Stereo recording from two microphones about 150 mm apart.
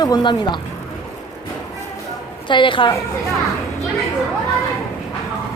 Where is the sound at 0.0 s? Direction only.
30° left (ahead or behind).